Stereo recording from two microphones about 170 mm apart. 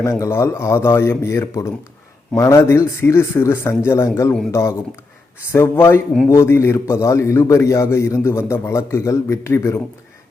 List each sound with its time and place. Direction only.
0.0 s a man's voice: 15° left (ahead or behind)
5.5 s a man's voice: 15° left (ahead or behind)